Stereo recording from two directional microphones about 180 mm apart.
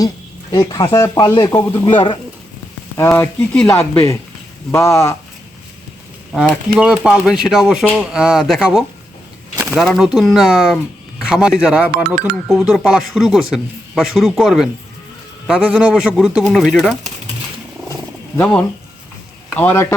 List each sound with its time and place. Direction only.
0.5 s speech: 20° left (ahead or behind)
3.0 s speech: 10° left (ahead or behind)
6.7 s speech: 5° right (ahead or behind)
18.3 s speech: 10° left (ahead or behind)